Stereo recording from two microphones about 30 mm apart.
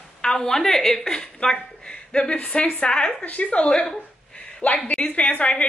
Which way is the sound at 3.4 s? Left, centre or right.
Left.